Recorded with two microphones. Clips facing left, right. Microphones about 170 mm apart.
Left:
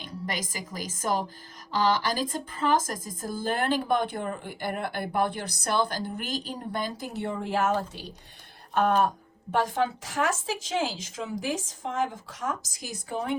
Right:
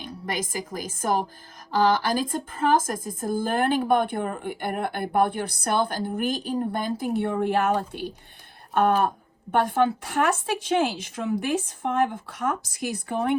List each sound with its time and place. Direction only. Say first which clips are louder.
0.3 s a woman's voice: right 5 dB; 50° right (ahead or behind)